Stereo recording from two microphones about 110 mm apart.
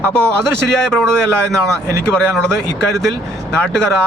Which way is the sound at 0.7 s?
5° left (ahead or behind).